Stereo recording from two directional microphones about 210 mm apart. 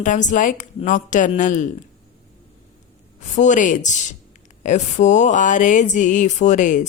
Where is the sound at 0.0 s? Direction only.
35° left (ahead or behind).